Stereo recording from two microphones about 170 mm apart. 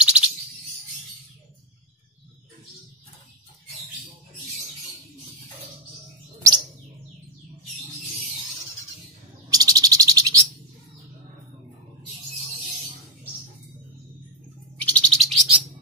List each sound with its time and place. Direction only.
0.0 s bird: 5° right (ahead or behind)
9.5 s bird: 20° right (ahead or behind)
14.8 s bird: 5° left (ahead or behind)